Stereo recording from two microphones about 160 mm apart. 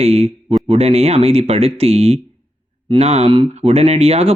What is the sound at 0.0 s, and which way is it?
Speech, 40° right (ahead or behind).